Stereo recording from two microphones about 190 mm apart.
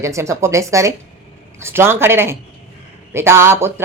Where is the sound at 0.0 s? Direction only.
15° right (ahead or behind).